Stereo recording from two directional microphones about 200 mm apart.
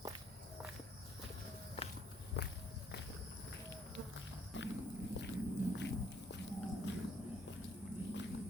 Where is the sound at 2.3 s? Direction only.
55° left (ahead or behind).